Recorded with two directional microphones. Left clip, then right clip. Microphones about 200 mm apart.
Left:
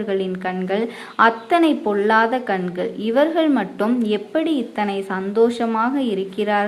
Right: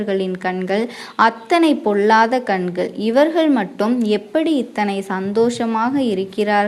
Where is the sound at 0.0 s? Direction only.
35° right (ahead or behind).